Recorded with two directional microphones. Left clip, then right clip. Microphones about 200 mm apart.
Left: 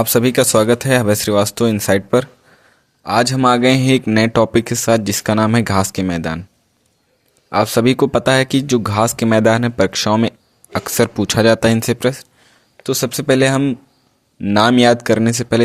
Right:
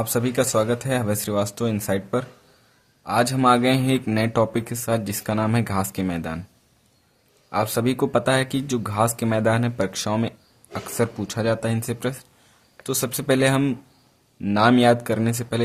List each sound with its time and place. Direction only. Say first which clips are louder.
0.0 s speech: left 9 dB; 40° left (ahead or behind)
7.5 s speech: left 9 dB; 30° left (ahead or behind)
14.5 s speech: left 5 dB; 35° left (ahead or behind)